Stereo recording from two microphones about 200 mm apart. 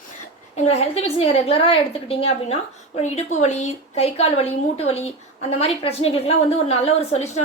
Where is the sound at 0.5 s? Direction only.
30° left (ahead or behind).